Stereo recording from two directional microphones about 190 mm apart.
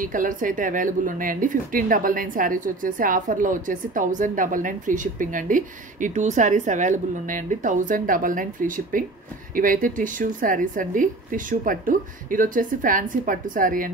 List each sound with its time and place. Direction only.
0.0 s a woman's voice: 45° right (ahead or behind)